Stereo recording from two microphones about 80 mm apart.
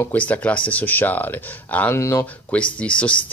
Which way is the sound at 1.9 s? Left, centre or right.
Left.